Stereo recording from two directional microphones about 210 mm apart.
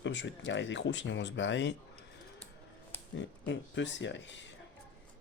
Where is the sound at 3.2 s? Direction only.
60° left (ahead or behind).